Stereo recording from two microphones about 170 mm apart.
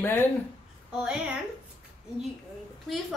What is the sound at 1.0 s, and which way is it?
Speech, 5° right (ahead or behind).